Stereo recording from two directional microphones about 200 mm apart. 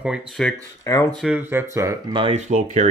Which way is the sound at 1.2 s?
5° right (ahead or behind).